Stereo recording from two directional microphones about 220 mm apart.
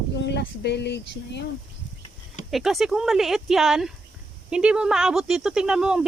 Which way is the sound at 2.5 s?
Centre (ahead or behind).